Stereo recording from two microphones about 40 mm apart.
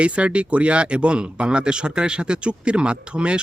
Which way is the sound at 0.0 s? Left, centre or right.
Right.